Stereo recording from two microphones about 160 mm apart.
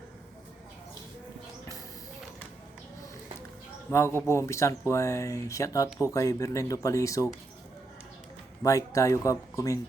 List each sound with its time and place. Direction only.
3.9 s speech: 15° left (ahead or behind)
8.6 s speech: 20° left (ahead or behind)